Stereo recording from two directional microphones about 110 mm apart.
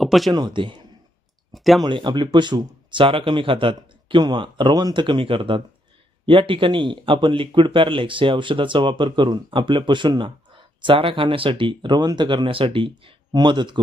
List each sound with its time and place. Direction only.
0.0 s speech: centre (ahead or behind)
0.3 s speech: 45° right (ahead or behind)
1.5 s speech: centre (ahead or behind)
1.8 s speech: 45° right (ahead or behind)